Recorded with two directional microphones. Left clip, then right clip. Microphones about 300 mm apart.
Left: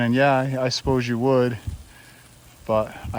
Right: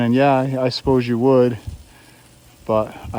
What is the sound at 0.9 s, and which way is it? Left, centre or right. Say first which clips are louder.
Speech: right 7 dB; left.